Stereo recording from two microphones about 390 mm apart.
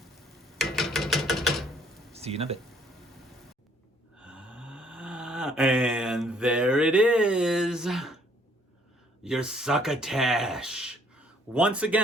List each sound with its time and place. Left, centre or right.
0.6 s a sound: centre
2.1 s speech: centre
4.2 s mantra: centre
9.2 s speech: centre